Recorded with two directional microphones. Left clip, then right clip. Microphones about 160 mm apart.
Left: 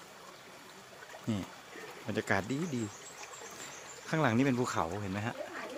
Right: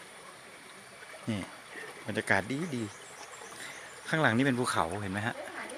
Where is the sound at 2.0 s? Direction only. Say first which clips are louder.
Right 3 dB; 15° left (ahead or behind).